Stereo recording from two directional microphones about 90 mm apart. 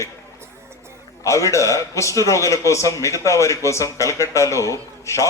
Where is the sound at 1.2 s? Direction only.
35° left (ahead or behind).